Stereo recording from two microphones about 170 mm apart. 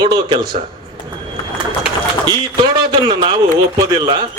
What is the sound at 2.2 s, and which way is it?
A man's voice, 25° right (ahead or behind).